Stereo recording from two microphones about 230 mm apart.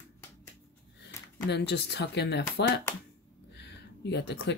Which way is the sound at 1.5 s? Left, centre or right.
Left.